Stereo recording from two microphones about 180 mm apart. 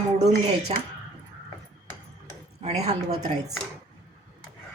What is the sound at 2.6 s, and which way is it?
Speech, 35° right (ahead or behind).